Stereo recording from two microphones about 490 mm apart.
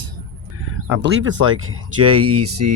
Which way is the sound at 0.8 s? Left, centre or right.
Right.